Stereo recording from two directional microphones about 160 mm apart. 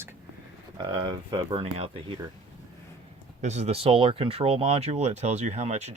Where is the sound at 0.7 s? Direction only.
30° right (ahead or behind).